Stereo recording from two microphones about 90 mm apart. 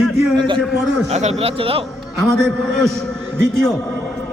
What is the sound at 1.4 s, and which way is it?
Speech, 90° right.